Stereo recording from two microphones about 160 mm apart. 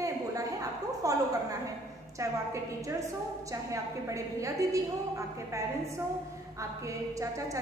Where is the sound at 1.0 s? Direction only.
20° right (ahead or behind).